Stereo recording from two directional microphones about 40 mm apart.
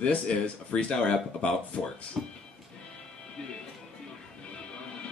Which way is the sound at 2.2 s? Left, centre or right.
Centre.